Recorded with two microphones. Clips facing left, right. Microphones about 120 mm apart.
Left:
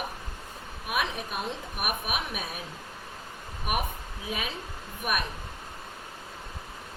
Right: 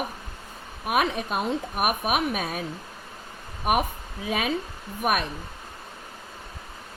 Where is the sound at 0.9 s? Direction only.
45° right (ahead or behind).